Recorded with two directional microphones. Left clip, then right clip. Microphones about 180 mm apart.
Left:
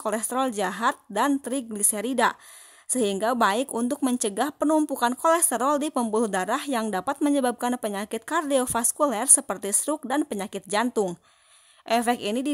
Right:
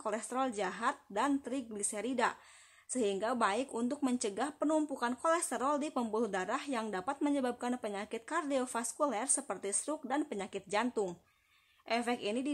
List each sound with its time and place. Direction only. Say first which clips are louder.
0.0 s speech: left 9 dB; 45° left (ahead or behind)